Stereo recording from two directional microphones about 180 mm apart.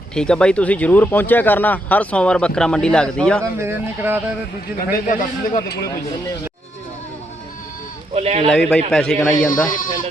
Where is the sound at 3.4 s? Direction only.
15° right (ahead or behind).